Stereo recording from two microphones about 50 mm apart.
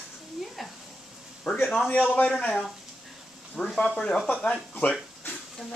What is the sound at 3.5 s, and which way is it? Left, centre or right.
Speech, centre.